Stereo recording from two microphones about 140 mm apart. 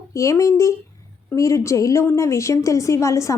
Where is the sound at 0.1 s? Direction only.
20° left (ahead or behind).